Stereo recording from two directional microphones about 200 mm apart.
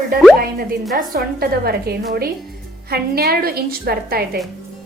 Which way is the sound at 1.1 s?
50° right (ahead or behind).